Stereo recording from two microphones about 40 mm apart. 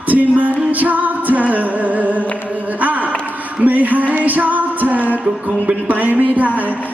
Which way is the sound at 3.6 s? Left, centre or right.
Right.